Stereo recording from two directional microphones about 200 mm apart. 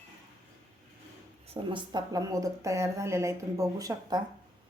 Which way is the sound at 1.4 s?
25° right (ahead or behind).